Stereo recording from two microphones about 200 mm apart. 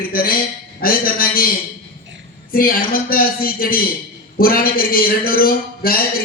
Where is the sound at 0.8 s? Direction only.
45° left (ahead or behind).